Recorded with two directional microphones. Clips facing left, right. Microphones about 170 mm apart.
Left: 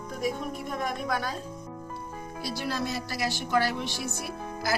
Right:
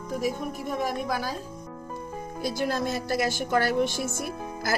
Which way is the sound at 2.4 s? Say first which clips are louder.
Right 4 dB; 50° right (ahead or behind).